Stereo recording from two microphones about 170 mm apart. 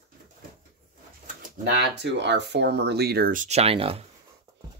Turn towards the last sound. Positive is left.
turn(degrees=-35)  # may be behind; listen again after turning